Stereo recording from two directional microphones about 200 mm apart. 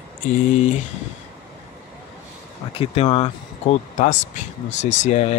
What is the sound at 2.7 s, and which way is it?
Speech, 30° left (ahead or behind).